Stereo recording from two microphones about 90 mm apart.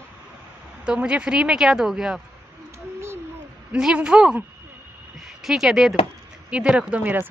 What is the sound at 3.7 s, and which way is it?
Speech, 10° right (ahead or behind).